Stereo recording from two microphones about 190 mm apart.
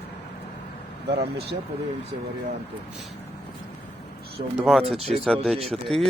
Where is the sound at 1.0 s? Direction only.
55° right (ahead or behind).